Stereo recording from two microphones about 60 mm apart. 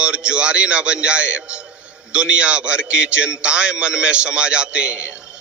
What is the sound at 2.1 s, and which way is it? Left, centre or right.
A man's voice, centre.